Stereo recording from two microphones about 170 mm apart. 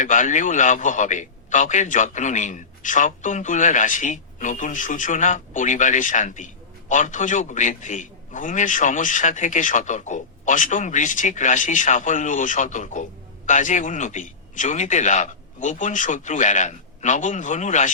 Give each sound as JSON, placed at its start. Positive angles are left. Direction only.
{"t": 0.0, "sound": "a man's voice", "side_deg": 45}